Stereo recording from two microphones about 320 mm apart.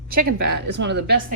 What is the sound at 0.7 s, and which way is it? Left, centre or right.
Speech, right.